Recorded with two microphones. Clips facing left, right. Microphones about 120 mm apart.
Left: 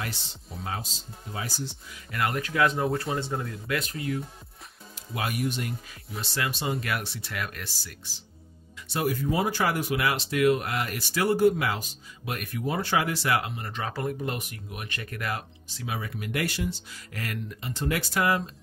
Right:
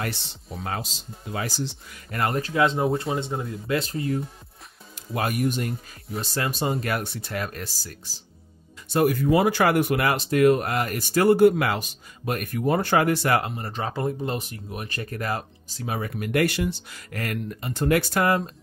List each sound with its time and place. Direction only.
0.9 s speech: 90° right
2.1 s speech: 35° right (ahead or behind)
5.1 s speech: 45° right (ahead or behind)
8.8 s speech: 50° right (ahead or behind)
11.3 s speech: 65° right (ahead or behind)
12.3 s speech: 45° right (ahead or behind)